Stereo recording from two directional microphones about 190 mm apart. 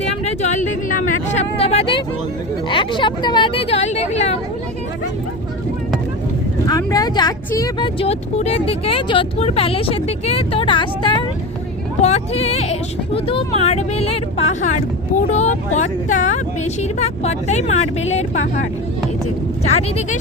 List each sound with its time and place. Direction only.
0.0 s speech: 35° left (ahead or behind)
6.7 s speech: 20° left (ahead or behind); by 20.1 s 35° left (ahead or behind)